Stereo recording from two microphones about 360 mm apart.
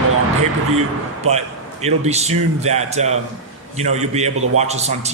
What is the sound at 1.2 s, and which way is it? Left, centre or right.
A man's voice, centre.